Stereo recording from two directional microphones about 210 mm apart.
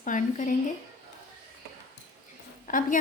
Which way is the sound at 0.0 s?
40° left (ahead or behind).